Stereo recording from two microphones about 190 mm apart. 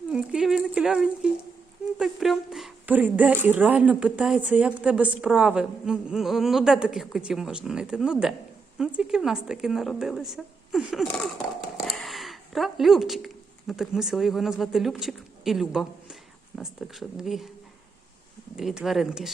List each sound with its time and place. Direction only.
0.1 s a sound: 5° right (ahead or behind)
3.4 s a woman's voice: 10° right (ahead or behind)
18.5 s a woman's voice: 5° right (ahead or behind)